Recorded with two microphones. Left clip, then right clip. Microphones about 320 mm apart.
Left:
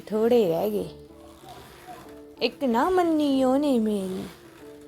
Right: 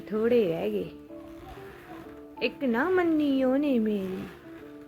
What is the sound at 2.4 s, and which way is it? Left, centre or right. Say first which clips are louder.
Speech: left 4 dB; centre.